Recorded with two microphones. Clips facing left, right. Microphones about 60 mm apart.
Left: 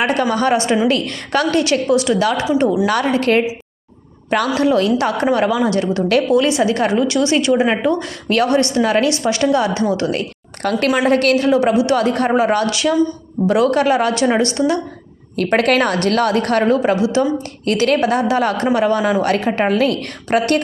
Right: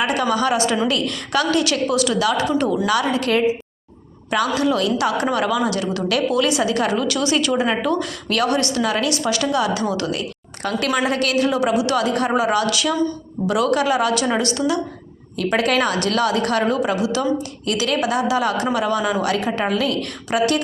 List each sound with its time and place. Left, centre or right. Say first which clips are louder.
0.0 s a woman's voice: left 3 dB; left
2.8 s a woman's voice: left 3 dB; left
15.4 s a woman's voice: left 4 dB; left
17.7 s a woman's voice: left 5 dB; left